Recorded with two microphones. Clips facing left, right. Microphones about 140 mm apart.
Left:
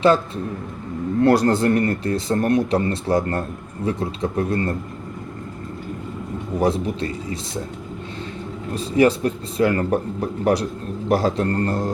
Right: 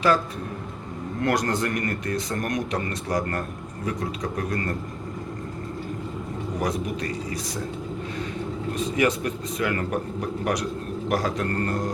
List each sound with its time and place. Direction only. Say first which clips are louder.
1.2 s speech: left 8 dB; 30° left (ahead or behind)
6.6 s speech: left 7 dB; 30° left (ahead or behind)
8.7 s speech: left 7 dB; 30° left (ahead or behind)